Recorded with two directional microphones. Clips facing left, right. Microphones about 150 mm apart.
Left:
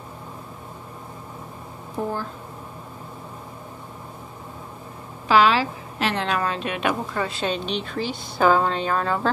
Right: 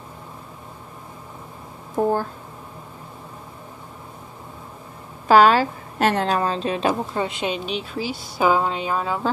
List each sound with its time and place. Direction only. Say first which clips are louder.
2.0 s speech: right 7 dB; 45° right (ahead or behind)
5.3 s a woman's voice: right 4 dB; 45° right (ahead or behind); by 7.2 s 30° right (ahead or behind)
7.2 s speech: even; 15° right (ahead or behind)